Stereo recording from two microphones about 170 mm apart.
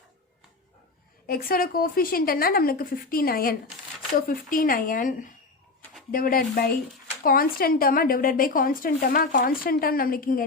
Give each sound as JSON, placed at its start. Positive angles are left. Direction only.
{"t": 1.3, "sound": "speech", "side_deg": 60}